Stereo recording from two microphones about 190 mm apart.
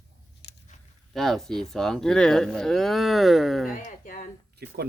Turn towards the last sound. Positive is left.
turn(degrees=-55)  # may be behind; listen again after turning